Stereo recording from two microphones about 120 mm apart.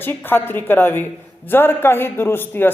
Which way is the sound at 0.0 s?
20° left (ahead or behind).